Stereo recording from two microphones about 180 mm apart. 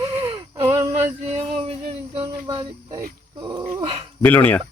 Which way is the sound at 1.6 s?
30° right (ahead or behind).